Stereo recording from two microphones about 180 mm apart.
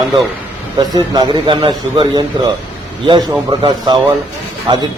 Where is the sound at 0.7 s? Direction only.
20° right (ahead or behind).